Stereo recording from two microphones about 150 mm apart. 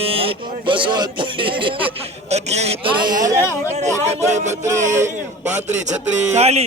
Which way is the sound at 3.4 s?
15° left (ahead or behind).